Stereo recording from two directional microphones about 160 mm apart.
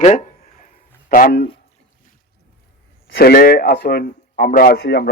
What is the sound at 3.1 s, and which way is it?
A man's voice, 80° left.